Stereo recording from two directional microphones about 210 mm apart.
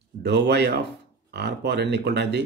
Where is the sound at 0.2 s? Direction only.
55° right (ahead or behind).